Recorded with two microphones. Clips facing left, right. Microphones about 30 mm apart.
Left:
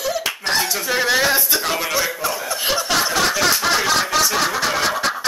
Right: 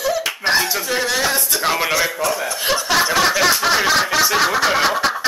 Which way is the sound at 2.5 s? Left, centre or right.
Centre.